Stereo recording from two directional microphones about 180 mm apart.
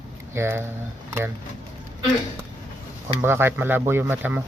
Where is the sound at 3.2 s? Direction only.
15° right (ahead or behind).